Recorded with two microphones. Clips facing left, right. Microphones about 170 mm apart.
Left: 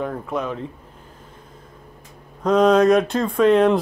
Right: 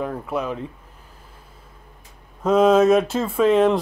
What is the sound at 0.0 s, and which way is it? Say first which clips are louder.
Speech: even; 5° right (ahead or behind).